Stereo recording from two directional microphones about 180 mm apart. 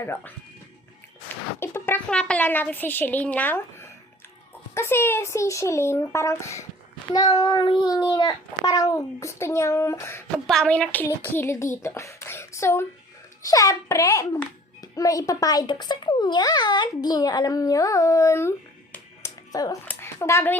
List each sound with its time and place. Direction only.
0.0 s speech: 10° left (ahead or behind)
1.5 s a child's voice: 15° left (ahead or behind)
10.4 s a child's voice: centre (ahead or behind)